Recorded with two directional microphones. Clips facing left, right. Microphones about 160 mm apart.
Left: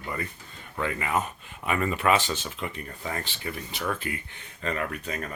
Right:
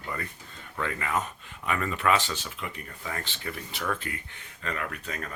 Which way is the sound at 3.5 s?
10° left (ahead or behind).